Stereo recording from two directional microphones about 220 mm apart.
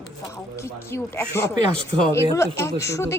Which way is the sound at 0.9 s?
10° left (ahead or behind).